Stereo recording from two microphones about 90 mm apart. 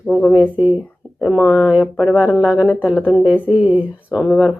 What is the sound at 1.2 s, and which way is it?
Speech, 5° right (ahead or behind).